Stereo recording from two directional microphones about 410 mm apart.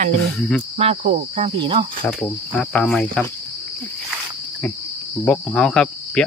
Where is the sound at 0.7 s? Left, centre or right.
Centre.